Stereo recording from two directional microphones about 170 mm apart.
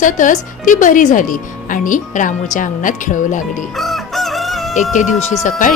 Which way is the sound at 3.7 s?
Centre (ahead or behind).